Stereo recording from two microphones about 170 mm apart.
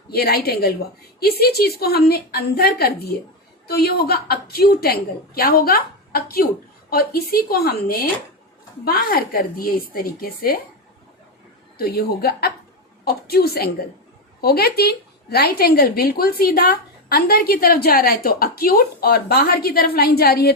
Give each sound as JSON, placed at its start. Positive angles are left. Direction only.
{"t": 0.1, "sound": "a woman's voice", "side_deg": 65}
{"t": 11.8, "sound": "a woman's voice", "side_deg": 65}